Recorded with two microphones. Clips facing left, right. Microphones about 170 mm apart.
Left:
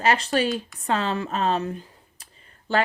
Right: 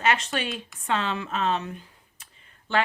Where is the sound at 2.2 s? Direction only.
35° left (ahead or behind).